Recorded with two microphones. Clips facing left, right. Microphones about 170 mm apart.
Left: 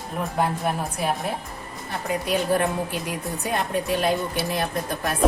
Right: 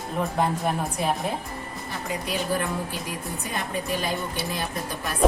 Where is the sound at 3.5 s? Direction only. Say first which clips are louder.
Left 5 dB; 65° left (ahead or behind).